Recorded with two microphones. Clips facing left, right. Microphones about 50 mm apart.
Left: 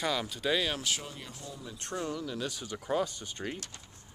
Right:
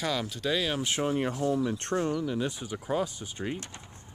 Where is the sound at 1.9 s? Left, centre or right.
Right.